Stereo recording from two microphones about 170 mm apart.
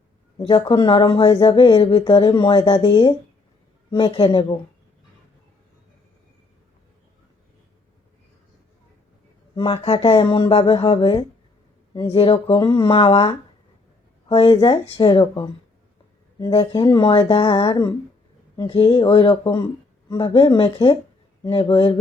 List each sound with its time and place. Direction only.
0.3 s speech: 30° left (ahead or behind)
9.6 s speech: 35° left (ahead or behind)